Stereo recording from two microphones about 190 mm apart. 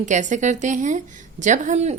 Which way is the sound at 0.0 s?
40° right (ahead or behind).